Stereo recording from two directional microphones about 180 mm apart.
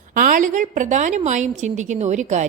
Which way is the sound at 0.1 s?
45° right (ahead or behind).